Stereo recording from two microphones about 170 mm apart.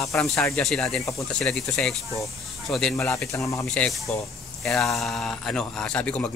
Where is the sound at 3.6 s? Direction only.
5° left (ahead or behind).